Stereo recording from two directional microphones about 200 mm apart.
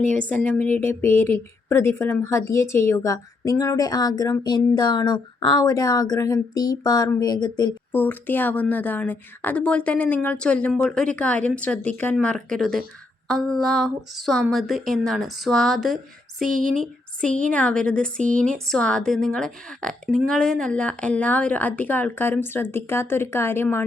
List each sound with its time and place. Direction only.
0.3 s speech: 10° left (ahead or behind)
7.9 s a woman's voice: 10° left (ahead or behind)
16.4 s a sound: centre (ahead or behind)
17.5 s a woman's voice: 5° left (ahead or behind)